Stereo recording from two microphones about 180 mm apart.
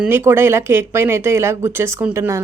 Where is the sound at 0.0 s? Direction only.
10° right (ahead or behind).